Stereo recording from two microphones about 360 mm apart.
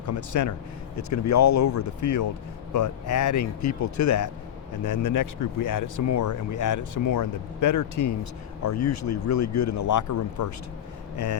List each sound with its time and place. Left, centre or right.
0.0 s speech: left